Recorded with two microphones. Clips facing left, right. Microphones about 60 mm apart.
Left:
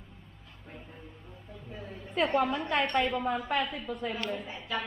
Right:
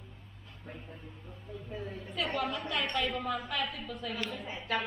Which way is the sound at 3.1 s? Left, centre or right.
Left.